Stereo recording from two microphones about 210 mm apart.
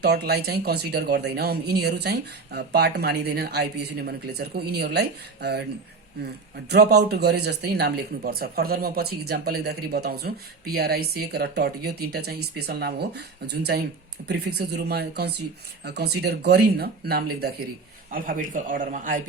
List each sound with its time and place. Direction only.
0.0 s speech: 50° right (ahead or behind)
6.7 s speech: 50° right (ahead or behind)